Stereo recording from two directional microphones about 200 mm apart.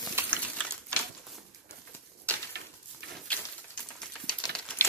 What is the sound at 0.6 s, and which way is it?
Sewing machine, 5° left (ahead or behind).